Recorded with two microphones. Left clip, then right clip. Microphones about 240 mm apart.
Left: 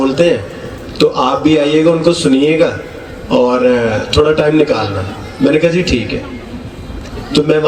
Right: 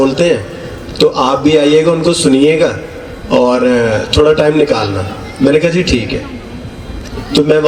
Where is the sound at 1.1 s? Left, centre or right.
Right.